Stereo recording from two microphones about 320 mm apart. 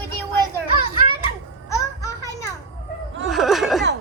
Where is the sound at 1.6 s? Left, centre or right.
Centre.